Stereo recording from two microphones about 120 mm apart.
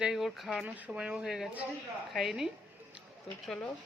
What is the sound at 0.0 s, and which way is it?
Speech, 5° right (ahead or behind).